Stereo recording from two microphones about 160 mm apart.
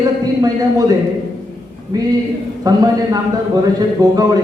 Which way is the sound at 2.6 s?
25° right (ahead or behind).